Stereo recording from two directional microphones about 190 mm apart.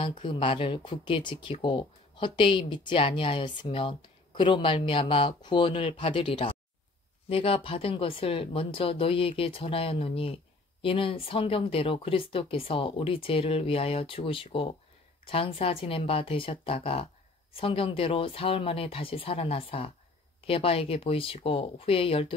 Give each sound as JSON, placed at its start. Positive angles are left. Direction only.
{"t": 0.2, "sound": "speech", "side_deg": 25}